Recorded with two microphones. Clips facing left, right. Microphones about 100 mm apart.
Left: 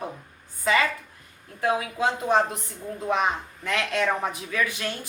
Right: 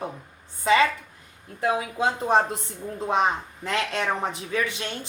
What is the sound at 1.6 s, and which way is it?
A woman's voice, 25° right (ahead or behind).